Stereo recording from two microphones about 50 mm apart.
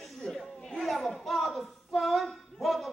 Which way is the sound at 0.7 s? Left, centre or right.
Centre.